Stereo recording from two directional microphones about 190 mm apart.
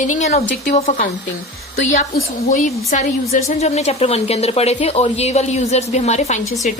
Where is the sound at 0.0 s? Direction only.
40° left (ahead or behind).